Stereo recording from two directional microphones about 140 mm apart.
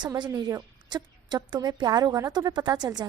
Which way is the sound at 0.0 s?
25° right (ahead or behind).